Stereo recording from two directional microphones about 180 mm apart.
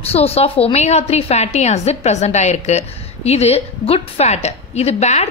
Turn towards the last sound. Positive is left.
turn(degrees=40)  # may be behind; listen again after turning